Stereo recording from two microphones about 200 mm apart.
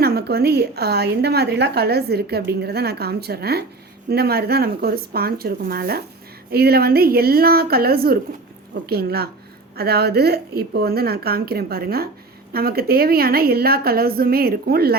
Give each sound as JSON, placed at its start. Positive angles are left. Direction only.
{"t": 0.0, "sound": "a woman's voice", "side_deg": -50}